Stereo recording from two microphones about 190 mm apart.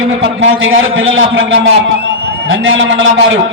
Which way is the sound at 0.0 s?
90° right.